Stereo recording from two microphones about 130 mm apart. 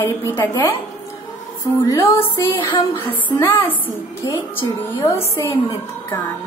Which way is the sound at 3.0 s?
15° left (ahead or behind).